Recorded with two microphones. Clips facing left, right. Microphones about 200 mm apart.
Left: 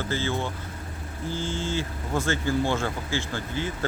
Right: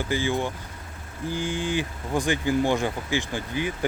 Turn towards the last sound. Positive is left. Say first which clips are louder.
# right 2 dB
turn(degrees=-15)  # may be behind; listen again after turning